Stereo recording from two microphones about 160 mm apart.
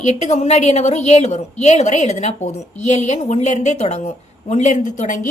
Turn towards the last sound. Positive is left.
turn(degrees=50)  # may be behind; listen again after turning